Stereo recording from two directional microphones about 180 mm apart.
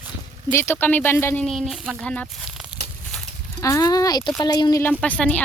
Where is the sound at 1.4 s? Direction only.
Centre (ahead or behind).